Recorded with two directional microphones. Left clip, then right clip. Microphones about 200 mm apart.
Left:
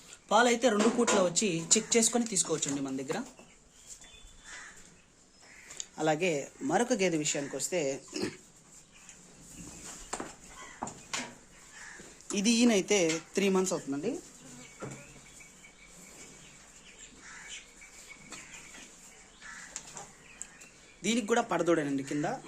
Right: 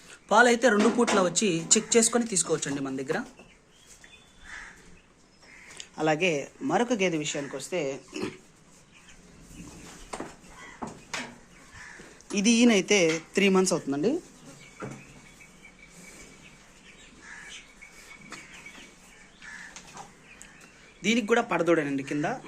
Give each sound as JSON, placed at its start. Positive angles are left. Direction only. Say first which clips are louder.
{"t": 0.3, "sound": "speech", "louder": "right 5 dB", "side_deg": 0}
{"t": 6.0, "sound": "speech", "louder": "right 4 dB", "side_deg": 10}
{"t": 12.3, "sound": "speech", "louder": "right 5 dB", "side_deg": 10}
{"t": 18.3, "sound": "a sound", "louder": "right 4 dB", "side_deg": 0}
{"t": 21.0, "sound": "speech", "louder": "right 5 dB", "side_deg": 10}